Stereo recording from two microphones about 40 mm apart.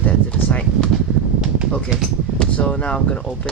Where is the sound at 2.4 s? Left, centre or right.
Left.